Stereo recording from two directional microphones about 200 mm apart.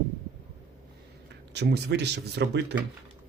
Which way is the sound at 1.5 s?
55° right (ahead or behind).